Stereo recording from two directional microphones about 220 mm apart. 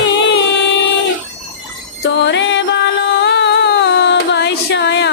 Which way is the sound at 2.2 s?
55° left (ahead or behind).